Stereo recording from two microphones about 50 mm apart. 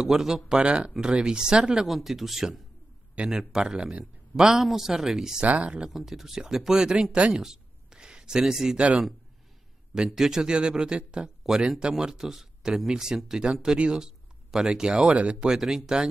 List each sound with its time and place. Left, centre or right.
0.0 s speech: centre
0.6 s speech: right
1.9 s a man's voice: centre
5.4 s speech: right
5.9 s speech: centre
7.3 s a sound: centre
9.9 s speech: centre
15.5 s speech: centre